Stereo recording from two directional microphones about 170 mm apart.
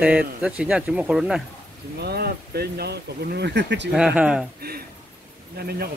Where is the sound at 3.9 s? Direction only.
5° right (ahead or behind).